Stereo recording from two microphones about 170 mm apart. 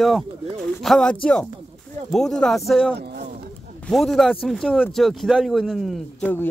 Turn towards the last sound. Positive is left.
turn(degrees=10)  # may be behind; listen again after turning